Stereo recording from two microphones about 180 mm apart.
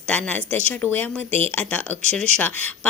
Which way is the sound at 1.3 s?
35° right (ahead or behind).